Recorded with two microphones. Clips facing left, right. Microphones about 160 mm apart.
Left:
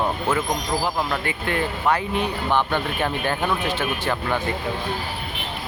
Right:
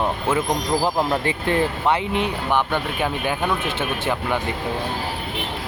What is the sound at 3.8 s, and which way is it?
Speech, 25° right (ahead or behind).